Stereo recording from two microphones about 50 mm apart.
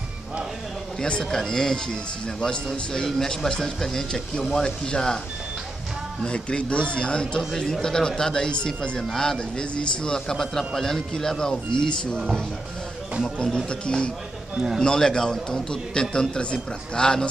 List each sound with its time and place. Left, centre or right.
1.0 s speech: centre
6.2 s speech: left
13.2 s speech: centre